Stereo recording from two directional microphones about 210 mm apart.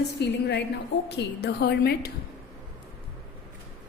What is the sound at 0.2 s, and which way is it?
A woman's voice, 50° left (ahead or behind).